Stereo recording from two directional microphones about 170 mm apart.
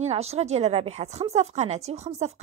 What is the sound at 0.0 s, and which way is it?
Speech, 40° right (ahead or behind).